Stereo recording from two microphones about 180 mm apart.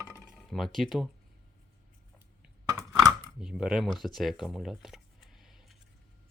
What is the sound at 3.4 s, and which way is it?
Speech, 5° right (ahead or behind).